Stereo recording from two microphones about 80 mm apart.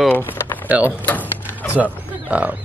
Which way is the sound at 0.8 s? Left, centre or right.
Left.